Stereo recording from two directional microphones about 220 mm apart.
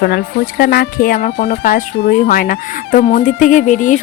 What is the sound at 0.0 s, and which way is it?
Speech, 45° left (ahead or behind).